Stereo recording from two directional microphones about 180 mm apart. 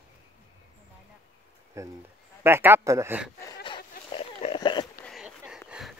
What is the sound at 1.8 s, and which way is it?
A man's voice, 15° right (ahead or behind).